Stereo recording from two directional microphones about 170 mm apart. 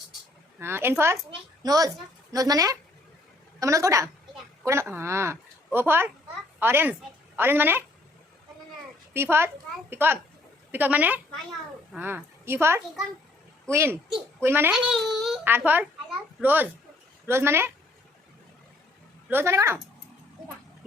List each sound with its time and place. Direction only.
0.6 s a woman's voice: 15° right (ahead or behind)
9.1 s a woman's voice: 15° right (ahead or behind)
14.7 s a child's voice: centre (ahead or behind)
19.3 s a woman's voice: 15° right (ahead or behind)